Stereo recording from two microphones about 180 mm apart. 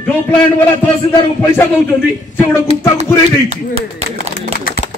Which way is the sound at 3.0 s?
35° right (ahead or behind).